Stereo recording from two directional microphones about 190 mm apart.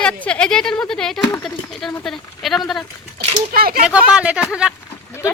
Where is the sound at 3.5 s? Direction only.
55° right (ahead or behind).